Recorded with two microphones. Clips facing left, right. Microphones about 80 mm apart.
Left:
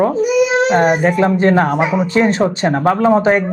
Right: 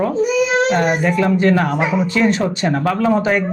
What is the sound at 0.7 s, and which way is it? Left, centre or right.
Speech, left.